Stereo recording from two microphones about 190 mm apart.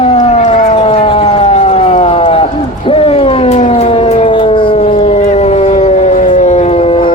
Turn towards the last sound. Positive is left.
turn(degrees=40)  # may be behind; listen again after turning